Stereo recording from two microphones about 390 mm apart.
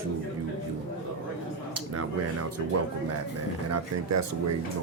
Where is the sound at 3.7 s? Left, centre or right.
Right.